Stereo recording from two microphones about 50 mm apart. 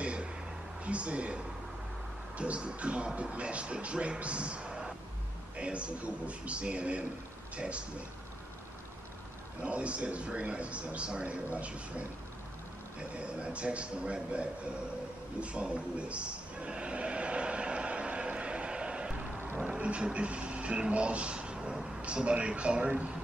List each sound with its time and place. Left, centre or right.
0.0 s a sound: right
0.8 s a man's voice: right
9.7 s a man's voice: right
13.1 s a man's voice: right
15.4 s a sound: right
19.8 s a man's voice: right